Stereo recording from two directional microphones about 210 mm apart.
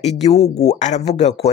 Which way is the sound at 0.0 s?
30° left (ahead or behind).